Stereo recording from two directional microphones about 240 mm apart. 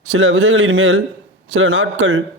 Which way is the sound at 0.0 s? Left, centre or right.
Right.